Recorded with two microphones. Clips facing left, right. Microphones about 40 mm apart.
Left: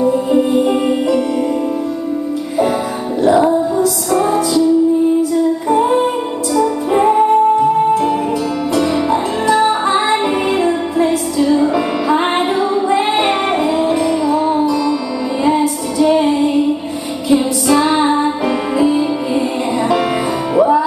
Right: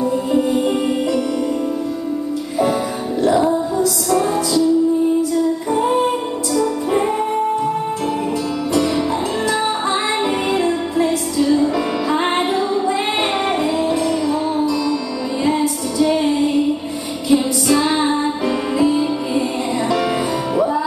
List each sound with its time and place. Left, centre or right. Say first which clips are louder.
0.0 s music: left 4 dB; centre
3.2 s music: left 4 dB; centre
5.7 s music: left 4 dB; centre
8.7 s music: left 3 dB; centre